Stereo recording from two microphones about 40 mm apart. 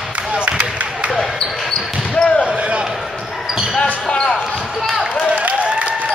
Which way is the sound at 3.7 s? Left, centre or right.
Left.